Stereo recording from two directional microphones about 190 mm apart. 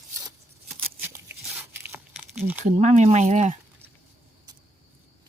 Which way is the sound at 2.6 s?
40° right (ahead or behind).